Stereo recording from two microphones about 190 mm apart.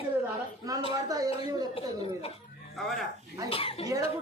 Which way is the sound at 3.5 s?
30° left (ahead or behind).